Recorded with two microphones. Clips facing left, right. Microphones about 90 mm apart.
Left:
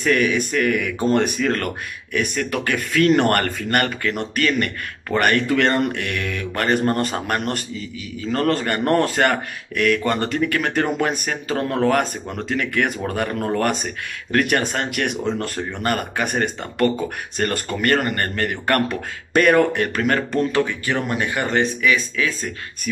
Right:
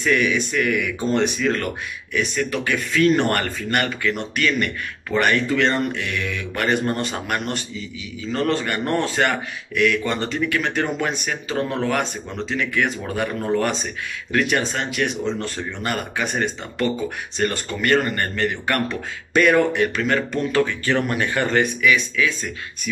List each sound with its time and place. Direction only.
0.0 s a man's voice: 45° left (ahead or behind)
20.5 s speech: 15° left (ahead or behind)
21.8 s speech: 35° left (ahead or behind)